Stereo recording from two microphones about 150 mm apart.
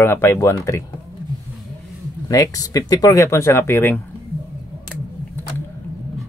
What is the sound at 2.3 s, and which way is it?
Speech, 25° left (ahead or behind).